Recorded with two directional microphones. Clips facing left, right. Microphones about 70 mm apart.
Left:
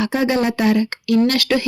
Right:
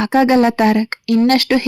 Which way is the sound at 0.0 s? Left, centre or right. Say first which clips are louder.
Right 6 dB; right.